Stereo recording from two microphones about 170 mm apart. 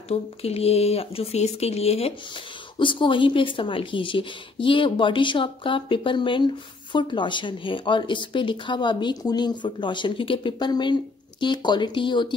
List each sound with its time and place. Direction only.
0.1 s speech: 35° left (ahead or behind)